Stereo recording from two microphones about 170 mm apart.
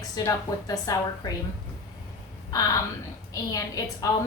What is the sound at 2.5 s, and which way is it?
Speech, 20° left (ahead or behind).